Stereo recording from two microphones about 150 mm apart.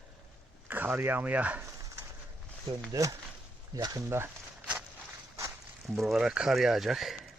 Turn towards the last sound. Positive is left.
turn(degrees=0)  # may be behind; listen again after turning